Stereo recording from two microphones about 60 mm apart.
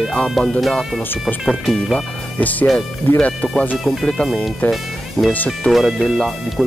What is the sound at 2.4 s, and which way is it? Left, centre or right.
Speech, left.